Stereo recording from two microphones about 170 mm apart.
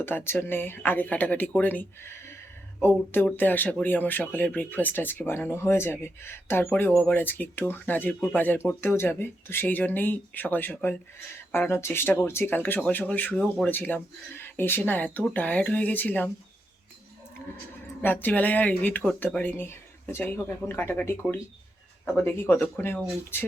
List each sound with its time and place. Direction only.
0.0 s speech: 10° left (ahead or behind)
18.0 s speech: 10° left (ahead or behind)